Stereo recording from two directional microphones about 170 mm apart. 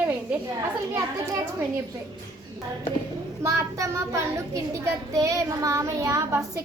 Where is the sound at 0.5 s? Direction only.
20° right (ahead or behind).